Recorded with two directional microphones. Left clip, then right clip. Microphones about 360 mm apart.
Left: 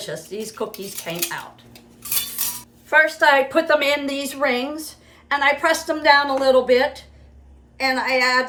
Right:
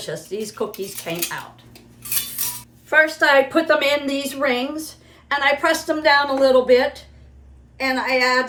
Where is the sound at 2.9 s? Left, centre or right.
Centre.